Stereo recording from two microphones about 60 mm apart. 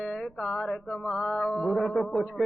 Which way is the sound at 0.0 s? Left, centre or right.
Centre.